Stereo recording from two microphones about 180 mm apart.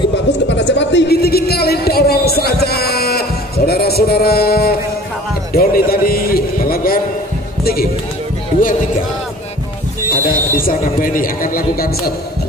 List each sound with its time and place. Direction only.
0.3 s a sound: 75° left (ahead or behind)
5.5 s a man's voice: 55° left (ahead or behind)
10.1 s speech: 50° left (ahead or behind)